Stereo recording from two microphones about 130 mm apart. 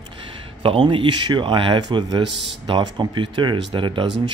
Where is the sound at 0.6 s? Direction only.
45° right (ahead or behind).